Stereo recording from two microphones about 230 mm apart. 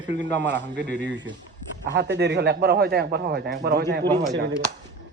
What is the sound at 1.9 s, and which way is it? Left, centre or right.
Speech, right.